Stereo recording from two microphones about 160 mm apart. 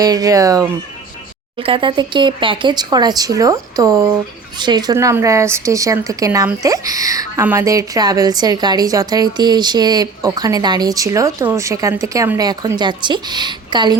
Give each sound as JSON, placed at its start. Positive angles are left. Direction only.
{"t": 0.0, "sound": "a woman's voice", "side_deg": -20}
{"t": 1.5, "sound": "a woman's voice", "side_deg": -35}